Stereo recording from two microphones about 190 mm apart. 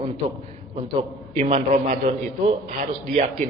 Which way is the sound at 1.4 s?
35° right (ahead or behind).